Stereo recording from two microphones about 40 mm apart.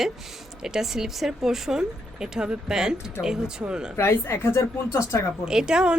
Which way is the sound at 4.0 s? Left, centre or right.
Left.